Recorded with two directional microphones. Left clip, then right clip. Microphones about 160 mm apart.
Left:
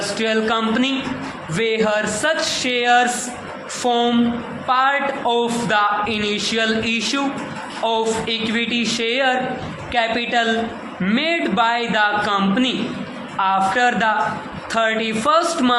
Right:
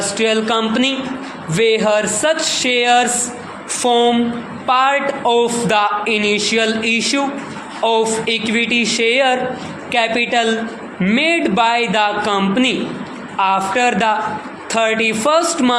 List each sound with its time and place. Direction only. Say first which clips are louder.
0.1 s a man's voice: right 3 dB; 30° right (ahead or behind)